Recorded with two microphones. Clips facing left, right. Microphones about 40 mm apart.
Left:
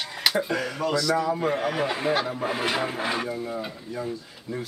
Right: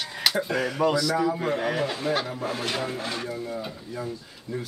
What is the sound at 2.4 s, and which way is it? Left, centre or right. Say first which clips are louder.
Speech: left 3 dB; left.